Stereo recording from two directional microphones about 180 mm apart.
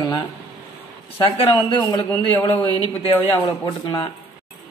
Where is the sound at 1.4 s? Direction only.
20° left (ahead or behind).